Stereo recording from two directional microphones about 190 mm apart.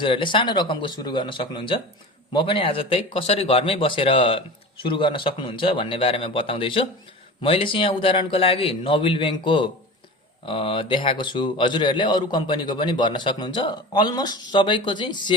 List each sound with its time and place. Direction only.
0.0 s a man's voice: 25° left (ahead or behind)